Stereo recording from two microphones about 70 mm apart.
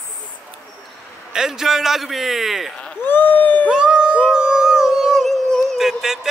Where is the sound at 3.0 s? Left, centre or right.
Left.